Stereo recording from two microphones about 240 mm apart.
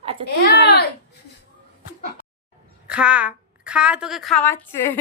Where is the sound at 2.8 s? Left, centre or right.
Centre.